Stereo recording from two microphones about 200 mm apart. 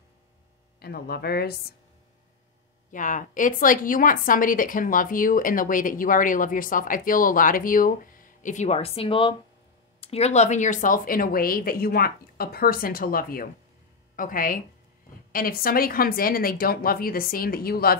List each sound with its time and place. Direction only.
0.7 s a woman's voice: 50° left (ahead or behind)
2.9 s a woman's voice: 40° left (ahead or behind)